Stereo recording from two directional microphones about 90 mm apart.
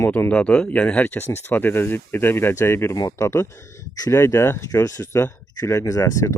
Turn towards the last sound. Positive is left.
turn(degrees=35)  # may be behind; listen again after turning